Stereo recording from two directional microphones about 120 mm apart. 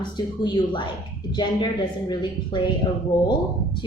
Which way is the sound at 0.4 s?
40° left (ahead or behind).